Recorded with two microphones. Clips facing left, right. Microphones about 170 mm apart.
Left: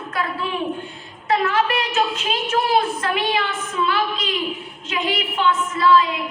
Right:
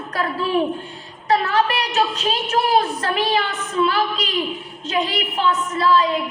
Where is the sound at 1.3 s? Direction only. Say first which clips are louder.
Right 1 dB; 35° right (ahead or behind).